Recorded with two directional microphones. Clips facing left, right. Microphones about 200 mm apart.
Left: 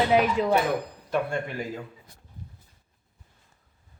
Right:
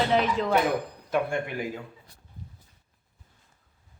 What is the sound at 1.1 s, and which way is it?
Speech, 10° right (ahead or behind).